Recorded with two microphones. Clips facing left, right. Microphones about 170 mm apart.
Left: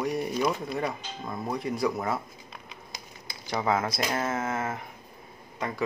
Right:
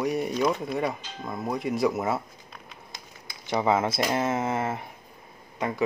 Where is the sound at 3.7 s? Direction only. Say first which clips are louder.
Right 3 dB; 25° right (ahead or behind).